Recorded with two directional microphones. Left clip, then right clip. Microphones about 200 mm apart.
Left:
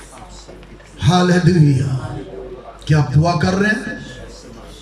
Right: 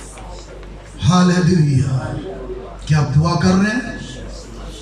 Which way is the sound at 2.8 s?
45° left (ahead or behind).